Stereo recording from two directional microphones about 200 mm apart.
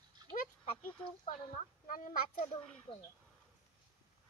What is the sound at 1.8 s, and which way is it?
Speech, 45° left (ahead or behind).